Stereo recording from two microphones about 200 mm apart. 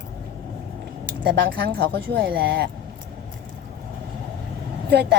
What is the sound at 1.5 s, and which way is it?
A woman's voice, 50° right (ahead or behind).